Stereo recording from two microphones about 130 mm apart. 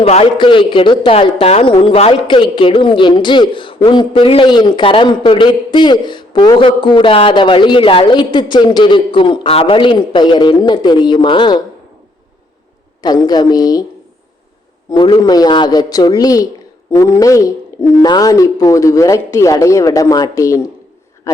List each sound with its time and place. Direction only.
0.0 s speech: 50° left (ahead or behind)
2.2 s a man's voice: 40° left (ahead or behind)
13.0 s a man's voice: 30° left (ahead or behind)
14.8 s a man's voice: 40° left (ahead or behind); by 21.4 s 25° left (ahead or behind)